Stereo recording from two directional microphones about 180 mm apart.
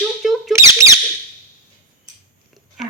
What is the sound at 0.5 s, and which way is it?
Speech, 15° right (ahead or behind).